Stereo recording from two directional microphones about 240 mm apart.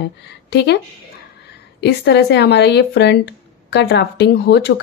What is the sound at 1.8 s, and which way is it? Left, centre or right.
Speech, left.